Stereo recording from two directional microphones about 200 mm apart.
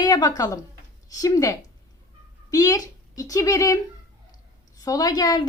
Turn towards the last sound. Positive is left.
turn(degrees=20)  # may be behind; listen again after turning